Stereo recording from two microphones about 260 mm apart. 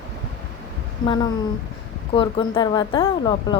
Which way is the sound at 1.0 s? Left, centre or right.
Centre.